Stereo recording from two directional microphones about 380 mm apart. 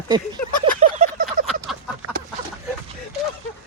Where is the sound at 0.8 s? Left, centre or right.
Centre.